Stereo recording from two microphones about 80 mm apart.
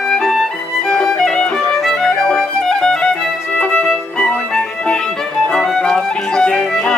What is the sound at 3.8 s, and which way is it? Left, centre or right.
Music, centre.